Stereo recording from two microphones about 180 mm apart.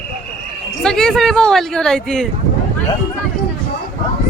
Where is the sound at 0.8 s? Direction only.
5° left (ahead or behind).